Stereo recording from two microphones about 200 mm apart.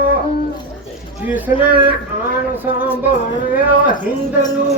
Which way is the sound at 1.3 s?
10° right (ahead or behind).